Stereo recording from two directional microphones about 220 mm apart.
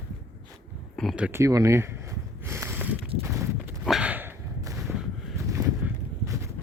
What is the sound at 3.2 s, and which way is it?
Walk, 10° right (ahead or behind).